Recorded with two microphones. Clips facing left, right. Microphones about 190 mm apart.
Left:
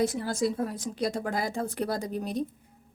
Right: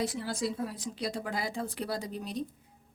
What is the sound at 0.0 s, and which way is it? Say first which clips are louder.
A woman's voice: left 5 dB; 45° left (ahead or behind).